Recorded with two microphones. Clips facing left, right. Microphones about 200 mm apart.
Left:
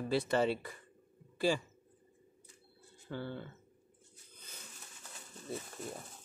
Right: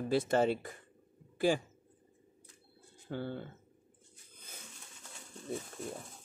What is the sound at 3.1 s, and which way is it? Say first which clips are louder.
Speech: right 2 dB; 50° right (ahead or behind).